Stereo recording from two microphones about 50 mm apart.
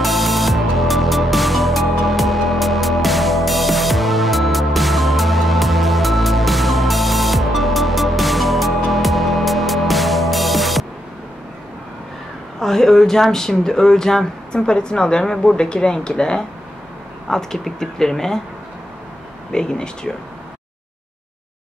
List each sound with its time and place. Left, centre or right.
0.0 s music: centre
12.5 s speech: centre
19.5 s speech: centre